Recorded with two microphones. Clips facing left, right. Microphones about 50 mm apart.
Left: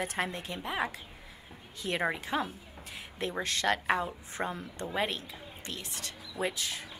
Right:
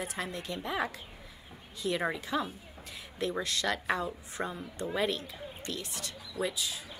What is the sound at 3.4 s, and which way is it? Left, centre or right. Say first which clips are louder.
A woman's voice: left 2 dB; left.